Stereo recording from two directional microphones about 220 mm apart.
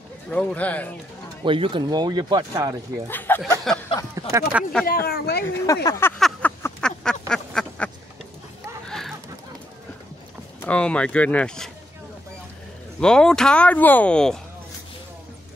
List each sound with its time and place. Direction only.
0.3 s speech: 5° left (ahead or behind)
1.4 s speech: 25° right (ahead or behind)
3.1 s speech: 10° left (ahead or behind)
3.7 s a sound: centre (ahead or behind)
4.1 s speech: 10° right (ahead or behind)
4.8 s speech: 45° left (ahead or behind)
5.9 s a sound: 10° left (ahead or behind)
10.6 s speech: 5° left (ahead or behind)
13.0 s speech: 5° left (ahead or behind)